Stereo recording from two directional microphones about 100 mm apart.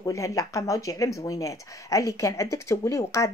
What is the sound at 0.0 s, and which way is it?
Speech, 35° left (ahead or behind).